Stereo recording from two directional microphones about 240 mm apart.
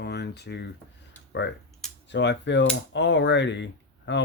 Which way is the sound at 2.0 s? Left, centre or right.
Left.